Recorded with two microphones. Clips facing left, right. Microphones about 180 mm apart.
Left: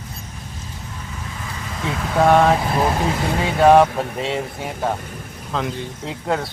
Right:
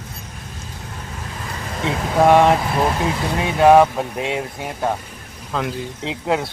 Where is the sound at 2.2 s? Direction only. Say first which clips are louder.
Right 2 dB; 5° right (ahead or behind).